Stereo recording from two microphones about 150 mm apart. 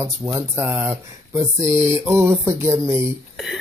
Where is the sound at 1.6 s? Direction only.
50° right (ahead or behind).